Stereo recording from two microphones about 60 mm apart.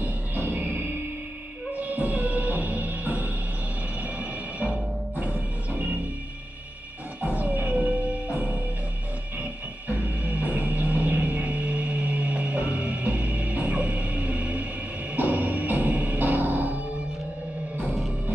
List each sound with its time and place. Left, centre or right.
0.0 s music: right
7.2 s music: right